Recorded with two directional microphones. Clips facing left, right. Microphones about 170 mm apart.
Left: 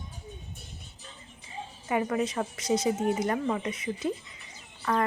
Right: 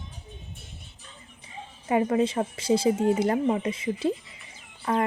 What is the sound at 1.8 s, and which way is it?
Speech, 25° right (ahead or behind).